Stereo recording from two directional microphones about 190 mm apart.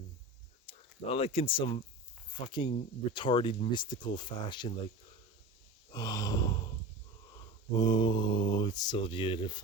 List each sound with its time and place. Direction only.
0.7 s speech: 30° left (ahead or behind)
5.9 s gasp: 20° left (ahead or behind)
7.3 s speech: 20° left (ahead or behind)